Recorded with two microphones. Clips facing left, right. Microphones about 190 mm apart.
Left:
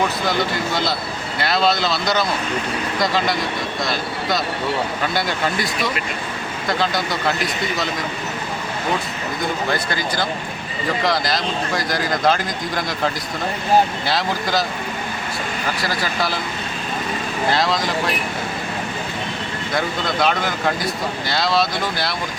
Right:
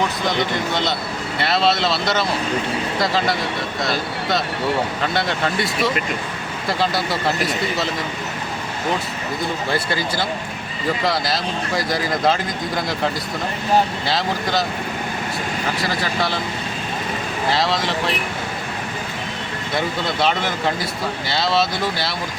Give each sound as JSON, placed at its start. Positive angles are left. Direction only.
{"t": 0.7, "sound": "a man's voice", "side_deg": 5}
{"t": 1.9, "sound": "speech", "side_deg": -25}
{"t": 3.0, "sound": "a man's voice", "side_deg": 0}
{"t": 6.7, "sound": "a man's voice", "side_deg": -5}
{"t": 11.0, "sound": "a man's voice", "side_deg": 0}
{"t": 14.1, "sound": "a man's voice", "side_deg": 0}
{"t": 17.5, "sound": "a man's voice", "side_deg": 0}
{"t": 19.7, "sound": "a man's voice", "side_deg": 0}